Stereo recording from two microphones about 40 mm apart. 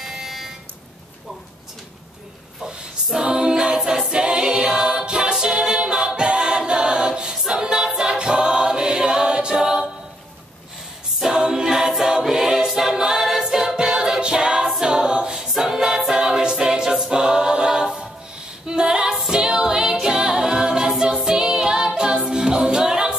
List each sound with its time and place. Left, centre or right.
0.0 s buzzer: centre
3.2 s a capella: right
4.1 s a capella: right
5.3 s choir: centre
11.1 s a capella: centre
12.0 s choir: centre
13.4 s a capella: centre
18.7 s female singing: centre
19.3 s a capella: centre
21.2 s music: centre